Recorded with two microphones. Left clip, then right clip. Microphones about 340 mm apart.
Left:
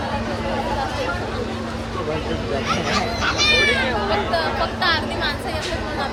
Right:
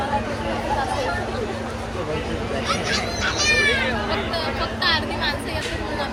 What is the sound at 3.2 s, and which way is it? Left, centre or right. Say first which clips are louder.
Speech: left 2 dB; centre.